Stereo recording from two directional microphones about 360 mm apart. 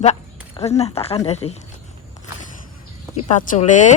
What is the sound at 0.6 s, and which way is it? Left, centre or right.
Speech, centre.